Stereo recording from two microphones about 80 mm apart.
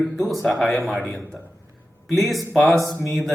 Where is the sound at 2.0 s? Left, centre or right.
Centre.